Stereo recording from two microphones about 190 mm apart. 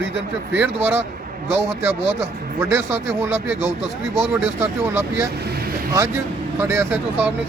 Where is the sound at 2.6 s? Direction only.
15° right (ahead or behind).